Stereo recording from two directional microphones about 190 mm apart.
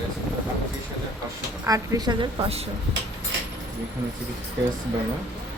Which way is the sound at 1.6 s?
20° right (ahead or behind).